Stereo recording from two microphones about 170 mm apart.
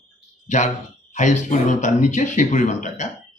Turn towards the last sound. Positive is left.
turn(degrees=45)  # may be behind; listen again after turning